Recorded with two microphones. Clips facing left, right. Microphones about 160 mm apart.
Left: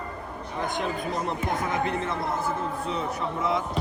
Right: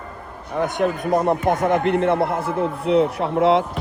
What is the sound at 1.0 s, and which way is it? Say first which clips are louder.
A man's voice: right 10 dB; 55° right (ahead or behind).